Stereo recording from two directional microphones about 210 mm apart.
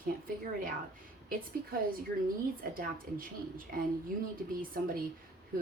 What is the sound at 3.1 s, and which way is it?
A woman's voice, 35° right (ahead or behind).